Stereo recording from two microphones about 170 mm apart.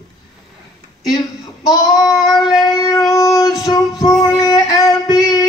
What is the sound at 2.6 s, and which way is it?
Music, 20° left (ahead or behind).